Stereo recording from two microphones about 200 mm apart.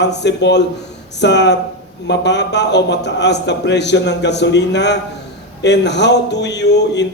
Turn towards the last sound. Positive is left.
turn(degrees=60)  # may be behind; listen again after turning